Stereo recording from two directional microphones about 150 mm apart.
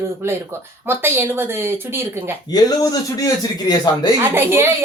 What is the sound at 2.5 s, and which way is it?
Speech, 25° left (ahead or behind).